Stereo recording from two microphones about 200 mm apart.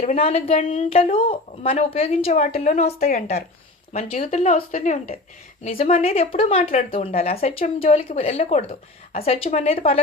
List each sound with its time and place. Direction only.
0.0 s a woman's voice: 30° left (ahead or behind); by 3.3 s 45° left (ahead or behind)
3.9 s a woman's voice: 35° left (ahead or behind)